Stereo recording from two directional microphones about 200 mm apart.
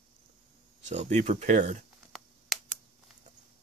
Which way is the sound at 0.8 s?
35° right (ahead or behind).